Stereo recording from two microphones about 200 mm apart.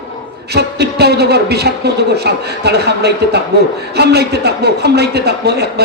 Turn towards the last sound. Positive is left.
turn(degrees=-55)  # may be behind; listen again after turning